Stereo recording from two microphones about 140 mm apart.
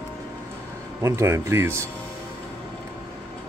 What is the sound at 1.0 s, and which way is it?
Speech, 20° right (ahead or behind).